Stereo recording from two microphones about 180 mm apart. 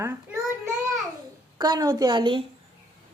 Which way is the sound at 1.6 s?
20° right (ahead or behind).